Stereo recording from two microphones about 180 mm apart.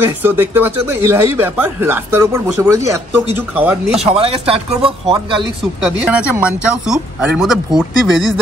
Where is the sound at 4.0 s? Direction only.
30° right (ahead or behind).